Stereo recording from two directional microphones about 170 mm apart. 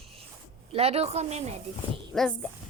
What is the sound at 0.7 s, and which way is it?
Speech, 35° right (ahead or behind).